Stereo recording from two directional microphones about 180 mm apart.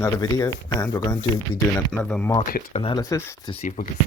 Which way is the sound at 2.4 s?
55° left (ahead or behind).